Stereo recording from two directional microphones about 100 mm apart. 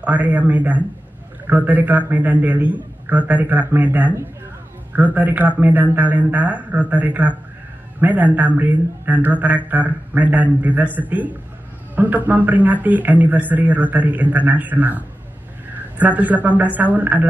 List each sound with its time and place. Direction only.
0.0 s a man's voice: 15° right (ahead or behind)